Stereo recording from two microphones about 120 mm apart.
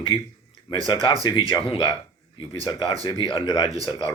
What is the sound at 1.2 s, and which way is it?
A man's voice, 40° left (ahead or behind).